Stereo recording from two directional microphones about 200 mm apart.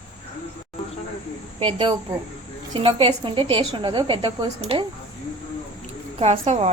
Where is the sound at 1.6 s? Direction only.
25° right (ahead or behind).